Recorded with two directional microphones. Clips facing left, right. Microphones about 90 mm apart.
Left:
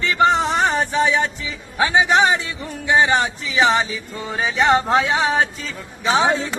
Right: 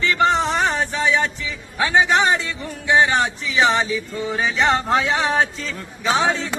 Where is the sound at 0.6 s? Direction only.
15° left (ahead or behind).